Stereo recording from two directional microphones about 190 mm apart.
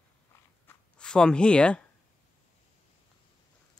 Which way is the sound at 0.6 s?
5° left (ahead or behind).